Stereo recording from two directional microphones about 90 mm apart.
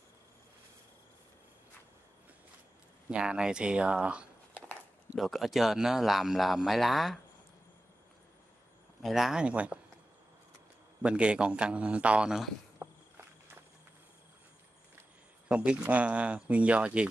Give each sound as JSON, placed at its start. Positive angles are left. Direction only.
{"t": 3.1, "sound": "a man's voice", "side_deg": -10}
{"t": 5.1, "sound": "speech", "side_deg": 0}
{"t": 9.0, "sound": "a man's voice", "side_deg": -5}
{"t": 11.0, "sound": "a man's voice", "side_deg": -10}
{"t": 12.8, "sound": "walk", "side_deg": -35}
{"t": 15.4, "sound": "a man's voice", "side_deg": -15}